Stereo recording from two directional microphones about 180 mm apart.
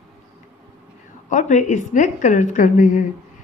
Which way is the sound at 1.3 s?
45° left (ahead or behind).